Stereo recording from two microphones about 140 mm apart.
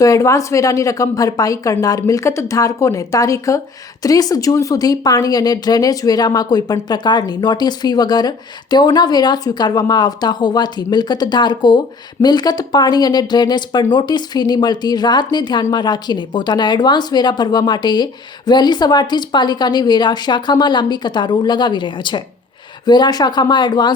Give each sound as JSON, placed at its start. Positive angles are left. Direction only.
{"t": 0.0, "sound": "a woman's voice", "side_deg": 25}